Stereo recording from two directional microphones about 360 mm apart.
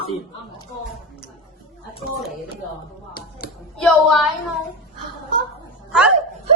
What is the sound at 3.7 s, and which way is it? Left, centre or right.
Hands, centre.